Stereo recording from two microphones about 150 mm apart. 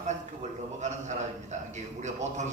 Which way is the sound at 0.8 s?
50° right (ahead or behind).